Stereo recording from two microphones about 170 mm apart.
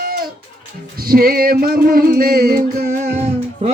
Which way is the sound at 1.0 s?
60° right (ahead or behind).